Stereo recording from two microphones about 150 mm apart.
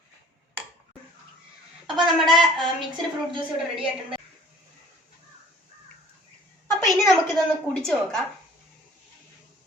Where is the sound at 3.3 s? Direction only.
35° right (ahead or behind).